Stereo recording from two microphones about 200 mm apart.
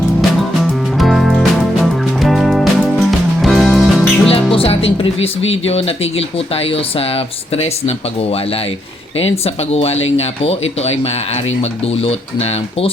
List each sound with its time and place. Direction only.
0.9 s music: centre (ahead or behind)
4.3 s speech: 30° left (ahead or behind)